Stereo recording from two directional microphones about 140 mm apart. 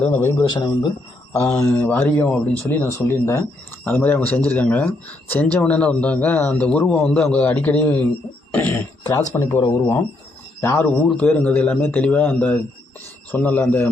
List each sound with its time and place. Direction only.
0.0 s a man's voice: 15° left (ahead or behind)
0.4 s speech: 30° left (ahead or behind)
1.3 s a man's voice: 20° left (ahead or behind)
10.6 s a man's voice: 15° left (ahead or behind)